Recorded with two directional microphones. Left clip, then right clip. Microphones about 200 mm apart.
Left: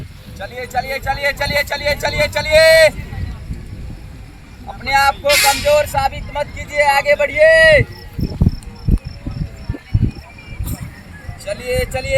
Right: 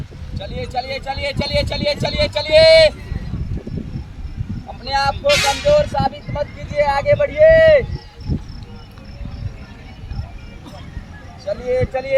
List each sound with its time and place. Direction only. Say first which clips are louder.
0.3 s speech: left 3 dB; 25° left (ahead or behind)
4.9 s speech: left 5 dB; 15° left (ahead or behind)
5.2 s a sound: left 2 dB; 50° right (ahead or behind)
5.6 s speech: left 1 dB; 20° left (ahead or behind)
11.4 s speech: right 1 dB; centre (ahead or behind)